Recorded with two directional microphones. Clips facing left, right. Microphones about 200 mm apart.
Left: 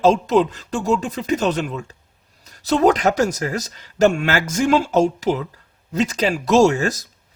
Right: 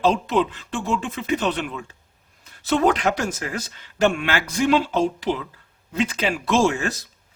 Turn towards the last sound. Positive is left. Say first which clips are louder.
# left 5 dB
turn(degrees=40)  # may be behind; listen again after turning